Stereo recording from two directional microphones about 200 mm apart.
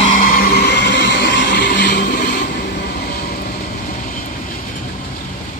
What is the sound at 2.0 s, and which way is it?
Vehicle, 40° left (ahead or behind).